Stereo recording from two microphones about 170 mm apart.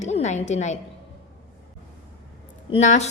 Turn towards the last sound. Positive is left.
turn(degrees=40)  # may be behind; listen again after turning